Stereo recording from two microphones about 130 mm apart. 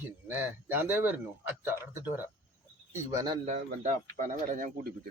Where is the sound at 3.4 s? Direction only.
65° right (ahead or behind).